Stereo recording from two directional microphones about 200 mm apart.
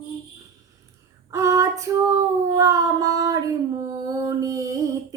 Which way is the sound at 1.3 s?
15° right (ahead or behind).